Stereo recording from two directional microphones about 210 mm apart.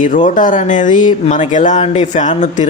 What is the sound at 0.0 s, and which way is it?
Speech, 40° left (ahead or behind).